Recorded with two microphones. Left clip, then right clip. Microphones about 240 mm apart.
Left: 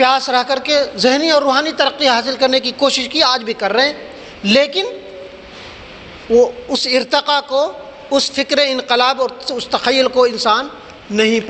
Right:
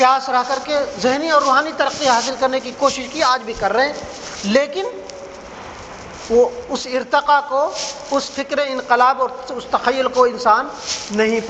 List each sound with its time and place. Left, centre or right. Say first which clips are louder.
0.0 s a man's voice: left 1 dB; left
6.3 s a man's voice: left 3 dB; left